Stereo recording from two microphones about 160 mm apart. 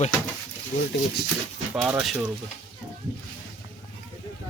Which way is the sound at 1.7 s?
10° right (ahead or behind).